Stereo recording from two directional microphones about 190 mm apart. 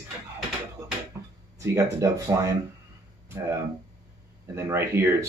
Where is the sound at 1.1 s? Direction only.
15° right (ahead or behind).